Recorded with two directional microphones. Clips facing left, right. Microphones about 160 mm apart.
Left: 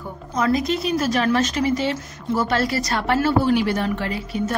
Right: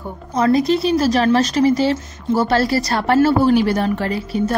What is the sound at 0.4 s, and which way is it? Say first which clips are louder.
Speech: right 5 dB; 35° right (ahead or behind).